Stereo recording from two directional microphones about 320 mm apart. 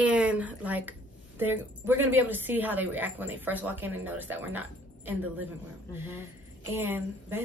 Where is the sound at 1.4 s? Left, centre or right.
Centre.